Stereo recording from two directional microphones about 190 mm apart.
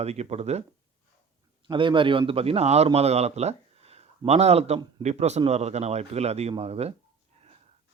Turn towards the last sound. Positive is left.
turn(degrees=-35)  # may be behind; listen again after turning